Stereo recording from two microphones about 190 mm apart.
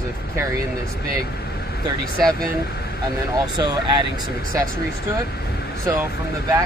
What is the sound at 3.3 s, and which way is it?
Speech, 20° right (ahead or behind).